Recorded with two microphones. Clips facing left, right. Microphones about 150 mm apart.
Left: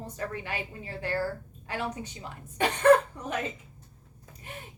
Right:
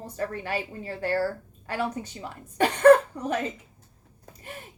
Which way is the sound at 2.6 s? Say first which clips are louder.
Right 4 dB; 45° right (ahead or behind).